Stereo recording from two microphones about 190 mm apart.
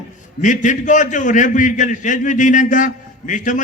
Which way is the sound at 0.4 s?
40° left (ahead or behind).